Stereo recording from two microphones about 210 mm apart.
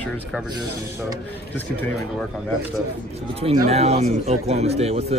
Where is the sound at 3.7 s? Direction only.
30° right (ahead or behind).